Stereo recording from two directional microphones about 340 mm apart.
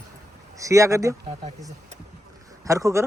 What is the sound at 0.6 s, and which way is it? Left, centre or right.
Speech, centre.